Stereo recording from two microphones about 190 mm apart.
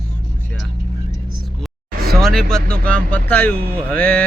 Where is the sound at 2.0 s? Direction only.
55° right (ahead or behind).